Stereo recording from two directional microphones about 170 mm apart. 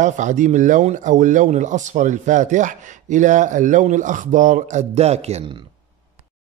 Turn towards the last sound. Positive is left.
turn(degrees=-40)  # may be behind; listen again after turning